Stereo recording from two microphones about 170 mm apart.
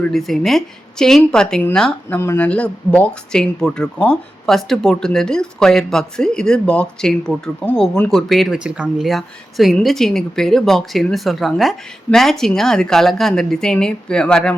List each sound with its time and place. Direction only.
0.0 s speech: centre (ahead or behind)